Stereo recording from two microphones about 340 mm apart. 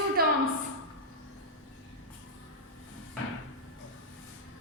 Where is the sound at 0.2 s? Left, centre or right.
Right.